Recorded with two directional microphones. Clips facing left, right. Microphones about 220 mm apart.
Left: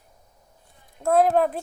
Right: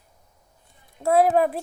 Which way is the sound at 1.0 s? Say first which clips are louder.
Right 1 dB; 5° right (ahead or behind).